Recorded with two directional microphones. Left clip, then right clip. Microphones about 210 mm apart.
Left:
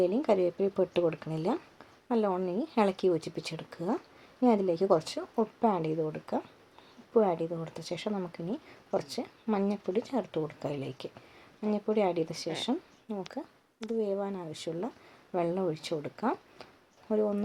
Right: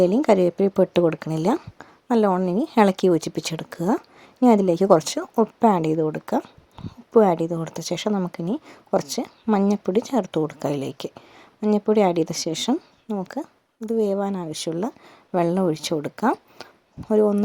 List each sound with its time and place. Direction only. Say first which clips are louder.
0.0 s speech: right 9 dB; 45° right (ahead or behind)